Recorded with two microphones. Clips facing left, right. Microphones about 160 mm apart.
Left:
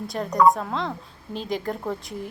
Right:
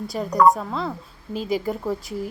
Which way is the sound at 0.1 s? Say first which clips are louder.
Right 1 dB; centre (ahead or behind).